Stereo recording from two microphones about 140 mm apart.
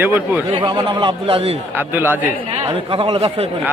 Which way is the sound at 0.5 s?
35° right (ahead or behind).